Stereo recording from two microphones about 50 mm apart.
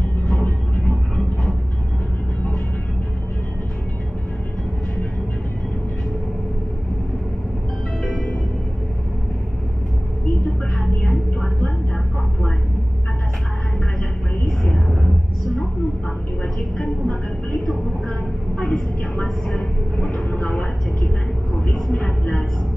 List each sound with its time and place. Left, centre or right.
0.3 s vehicle: left
10.8 s a sound: centre
14.6 s a sound: centre
16.8 s vehicle: left
18.6 s vehicle: left
19.2 s train: centre
20.0 s vehicle: left
21.9 s music: left